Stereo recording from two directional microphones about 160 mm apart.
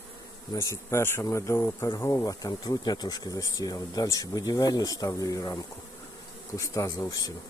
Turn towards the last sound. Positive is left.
turn(degrees=20)  # may be behind; listen again after turning